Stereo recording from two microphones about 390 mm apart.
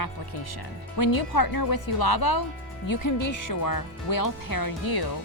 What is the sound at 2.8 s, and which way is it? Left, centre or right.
Speech, left.